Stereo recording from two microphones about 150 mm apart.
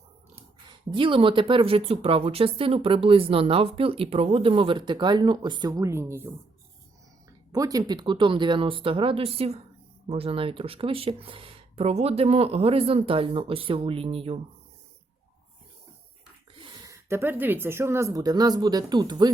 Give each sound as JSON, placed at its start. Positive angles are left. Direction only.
{"t": 0.9, "sound": "speech", "side_deg": -35}
{"t": 7.5, "sound": "speech", "side_deg": -25}
{"t": 16.6, "sound": "speech", "side_deg": -30}